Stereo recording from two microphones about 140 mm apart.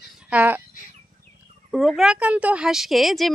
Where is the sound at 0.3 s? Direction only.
10° right (ahead or behind).